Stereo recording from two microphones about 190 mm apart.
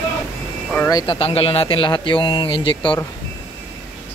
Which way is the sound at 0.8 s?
25° left (ahead or behind).